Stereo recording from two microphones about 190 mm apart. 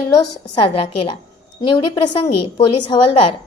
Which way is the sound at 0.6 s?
30° left (ahead or behind).